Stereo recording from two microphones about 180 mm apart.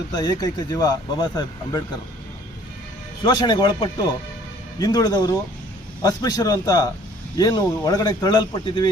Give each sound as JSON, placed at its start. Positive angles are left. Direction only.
{"t": 0.1, "sound": "speech", "side_deg": 20}
{"t": 3.2, "sound": "speech", "side_deg": 25}